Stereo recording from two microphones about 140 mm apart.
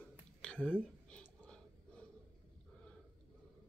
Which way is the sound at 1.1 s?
10° left (ahead or behind).